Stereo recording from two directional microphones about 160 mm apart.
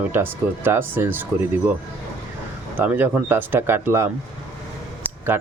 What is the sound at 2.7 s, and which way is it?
A man's voice, 10° right (ahead or behind).